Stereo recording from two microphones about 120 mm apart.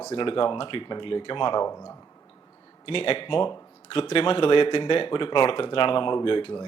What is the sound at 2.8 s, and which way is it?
Speech, 50° left (ahead or behind).